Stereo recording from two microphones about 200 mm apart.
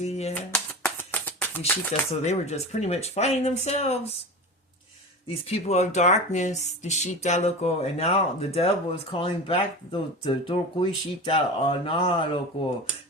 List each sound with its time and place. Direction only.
0.0 s speech: 30° left (ahead or behind)
0.5 s shuffling cards: 5° left (ahead or behind)
1.9 s speech: 35° left (ahead or behind)
5.5 s speech: 30° left (ahead or behind)